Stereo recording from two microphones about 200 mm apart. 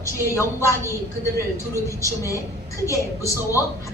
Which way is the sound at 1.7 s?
15° left (ahead or behind).